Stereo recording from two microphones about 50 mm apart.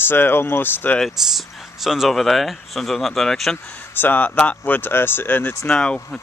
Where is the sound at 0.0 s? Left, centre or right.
Left.